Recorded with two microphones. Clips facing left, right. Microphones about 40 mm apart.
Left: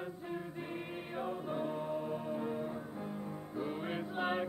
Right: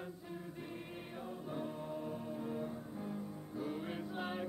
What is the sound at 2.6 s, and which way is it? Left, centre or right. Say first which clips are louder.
Music: left 3 dB; centre.